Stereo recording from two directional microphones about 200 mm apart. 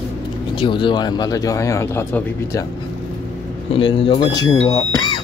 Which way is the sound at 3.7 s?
25° left (ahead or behind).